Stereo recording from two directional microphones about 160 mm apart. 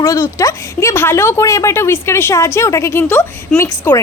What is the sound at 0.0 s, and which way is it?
Speech, 20° left (ahead or behind).